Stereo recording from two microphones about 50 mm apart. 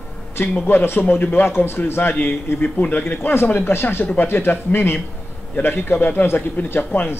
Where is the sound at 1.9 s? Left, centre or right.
Left.